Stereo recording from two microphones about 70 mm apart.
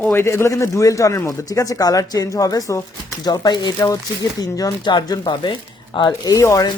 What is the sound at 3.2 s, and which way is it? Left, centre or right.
Speech, left.